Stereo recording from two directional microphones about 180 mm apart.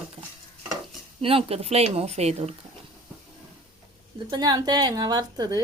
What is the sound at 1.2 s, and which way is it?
A woman's voice, 30° right (ahead or behind).